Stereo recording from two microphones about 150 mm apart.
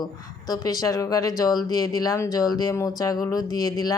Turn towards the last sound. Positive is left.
turn(degrees=25)  # may be behind; listen again after turning